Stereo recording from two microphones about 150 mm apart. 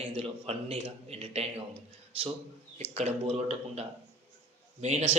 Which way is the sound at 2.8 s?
45° right (ahead or behind).